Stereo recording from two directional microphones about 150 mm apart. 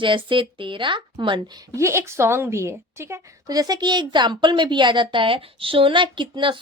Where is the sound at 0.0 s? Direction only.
35° right (ahead or behind).